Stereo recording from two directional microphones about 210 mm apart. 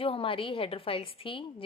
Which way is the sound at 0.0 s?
25° left (ahead or behind).